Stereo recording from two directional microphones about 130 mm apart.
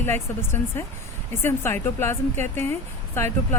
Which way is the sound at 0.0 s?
15° left (ahead or behind).